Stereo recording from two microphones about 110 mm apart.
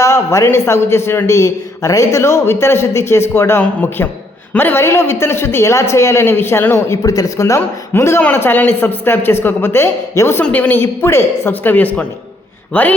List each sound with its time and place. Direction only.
0.0 s a man's voice: 25° left (ahead or behind)